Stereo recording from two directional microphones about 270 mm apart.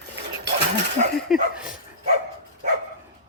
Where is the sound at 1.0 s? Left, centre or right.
Right.